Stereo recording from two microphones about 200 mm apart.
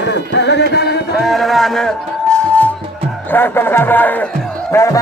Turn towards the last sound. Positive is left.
turn(degrees=15)  # may be behind; listen again after turning